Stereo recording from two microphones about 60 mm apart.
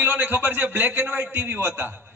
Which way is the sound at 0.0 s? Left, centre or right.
Right.